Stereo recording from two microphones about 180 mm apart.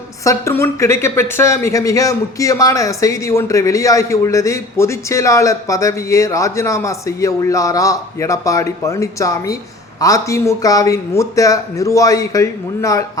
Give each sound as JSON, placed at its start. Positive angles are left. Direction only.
{"t": 0.3, "sound": "speech", "side_deg": 15}